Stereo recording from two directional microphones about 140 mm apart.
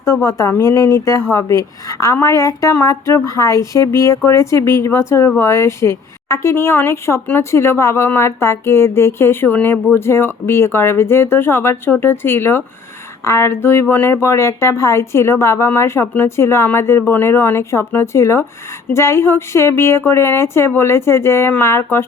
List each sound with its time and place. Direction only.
0.0 s speech: 20° left (ahead or behind)